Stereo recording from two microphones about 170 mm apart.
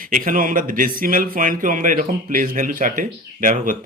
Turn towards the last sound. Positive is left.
turn(degrees=-50)  # may be behind; listen again after turning